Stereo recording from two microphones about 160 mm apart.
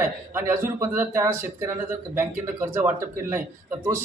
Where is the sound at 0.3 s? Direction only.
15° right (ahead or behind).